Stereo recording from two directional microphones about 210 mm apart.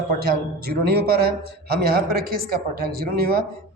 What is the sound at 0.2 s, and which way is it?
A man's voice, 50° right (ahead or behind).